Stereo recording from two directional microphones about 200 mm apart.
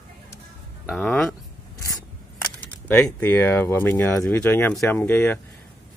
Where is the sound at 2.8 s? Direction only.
10° left (ahead or behind).